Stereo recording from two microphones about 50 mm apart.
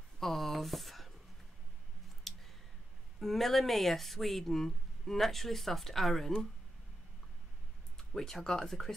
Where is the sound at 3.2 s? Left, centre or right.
Centre.